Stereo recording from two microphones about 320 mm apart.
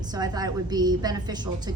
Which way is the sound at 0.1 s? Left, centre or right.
Centre.